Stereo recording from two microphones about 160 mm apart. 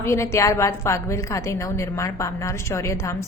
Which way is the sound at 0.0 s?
15° left (ahead or behind).